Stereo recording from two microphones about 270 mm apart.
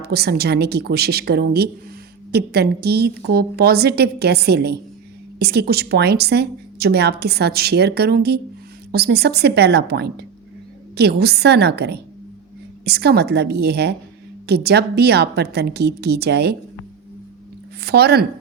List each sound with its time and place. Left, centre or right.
0.0 s speech: right
17.8 s speech: right